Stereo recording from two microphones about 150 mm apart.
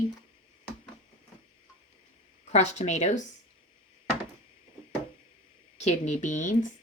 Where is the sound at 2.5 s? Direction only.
50° left (ahead or behind).